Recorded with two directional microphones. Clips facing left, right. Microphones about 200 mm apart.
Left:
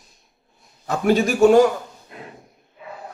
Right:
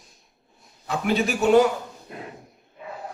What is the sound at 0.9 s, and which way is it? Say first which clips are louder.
Speech: left 5 dB; 45° left (ahead or behind).